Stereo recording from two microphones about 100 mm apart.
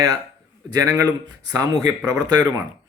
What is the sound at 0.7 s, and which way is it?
Speech, 35° right (ahead or behind).